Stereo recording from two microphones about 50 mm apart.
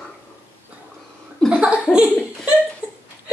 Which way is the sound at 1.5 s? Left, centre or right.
Right.